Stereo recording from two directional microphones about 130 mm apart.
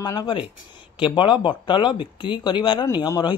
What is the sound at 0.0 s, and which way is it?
Speech, 30° left (ahead or behind).